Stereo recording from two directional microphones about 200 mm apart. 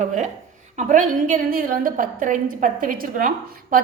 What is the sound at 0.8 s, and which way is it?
A woman's voice, 40° right (ahead or behind).